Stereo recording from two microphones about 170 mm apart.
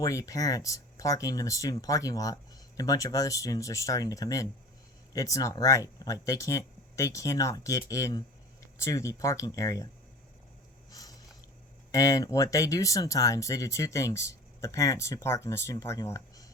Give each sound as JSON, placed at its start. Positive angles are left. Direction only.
{"t": 0.0, "sound": "speech", "side_deg": 20}
{"t": 11.9, "sound": "speech", "side_deg": 20}